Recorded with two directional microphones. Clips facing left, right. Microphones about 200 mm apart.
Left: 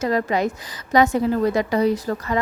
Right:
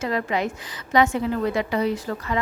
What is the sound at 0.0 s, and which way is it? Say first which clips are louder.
A woman's voice: left 4 dB; 40° left (ahead or behind).